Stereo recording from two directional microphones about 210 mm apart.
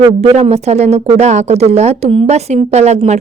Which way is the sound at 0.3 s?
30° right (ahead or behind).